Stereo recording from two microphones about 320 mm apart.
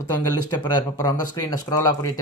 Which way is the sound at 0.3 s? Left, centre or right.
Centre.